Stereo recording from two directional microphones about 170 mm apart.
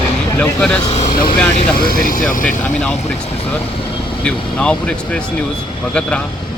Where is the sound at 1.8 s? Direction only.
60° left (ahead or behind).